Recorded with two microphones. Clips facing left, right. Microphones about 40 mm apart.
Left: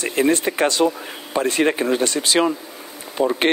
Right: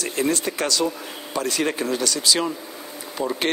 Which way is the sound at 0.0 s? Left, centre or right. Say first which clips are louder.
Left 5 dB; left.